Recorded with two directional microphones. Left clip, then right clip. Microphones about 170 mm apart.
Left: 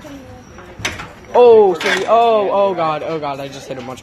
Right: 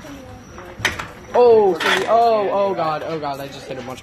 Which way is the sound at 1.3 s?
30° left (ahead or behind).